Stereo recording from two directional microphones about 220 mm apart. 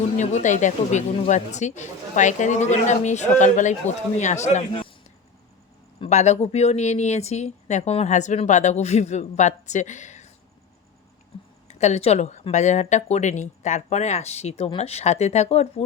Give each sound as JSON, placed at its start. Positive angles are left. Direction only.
{"t": 0.2, "sound": "speech", "side_deg": 35}
{"t": 6.0, "sound": "speech", "side_deg": 30}
{"t": 11.7, "sound": "speech", "side_deg": 30}